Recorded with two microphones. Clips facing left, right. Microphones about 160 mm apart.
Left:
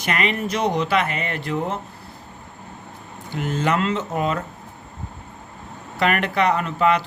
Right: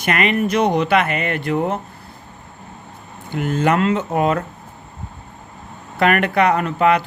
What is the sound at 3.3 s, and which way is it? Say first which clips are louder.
Speech: right 4 dB; 55° right (ahead or behind).